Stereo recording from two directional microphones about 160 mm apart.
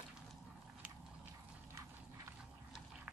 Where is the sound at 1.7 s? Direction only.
20° right (ahead or behind).